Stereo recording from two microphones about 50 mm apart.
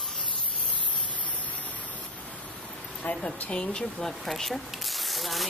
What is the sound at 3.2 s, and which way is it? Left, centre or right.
Speech, left.